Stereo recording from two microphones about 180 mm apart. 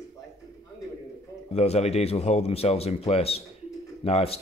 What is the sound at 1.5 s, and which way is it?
Speech, 35° left (ahead or behind).